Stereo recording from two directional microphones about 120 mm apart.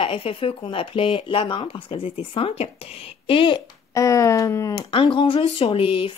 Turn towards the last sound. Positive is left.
turn(degrees=50)  # may be behind; listen again after turning